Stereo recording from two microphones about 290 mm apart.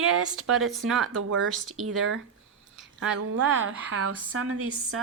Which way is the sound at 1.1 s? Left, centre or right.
Right.